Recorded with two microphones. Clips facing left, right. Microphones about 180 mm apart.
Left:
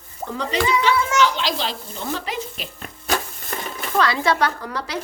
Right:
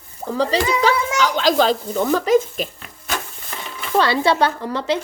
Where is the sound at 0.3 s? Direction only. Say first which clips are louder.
Right 3 dB; 35° right (ahead or behind).